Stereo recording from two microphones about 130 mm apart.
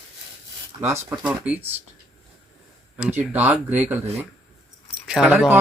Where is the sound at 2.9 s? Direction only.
15° right (ahead or behind).